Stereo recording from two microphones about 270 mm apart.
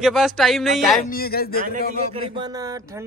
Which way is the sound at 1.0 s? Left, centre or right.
Left.